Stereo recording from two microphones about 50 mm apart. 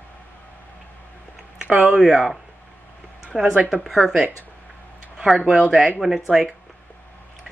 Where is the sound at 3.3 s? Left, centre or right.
Centre.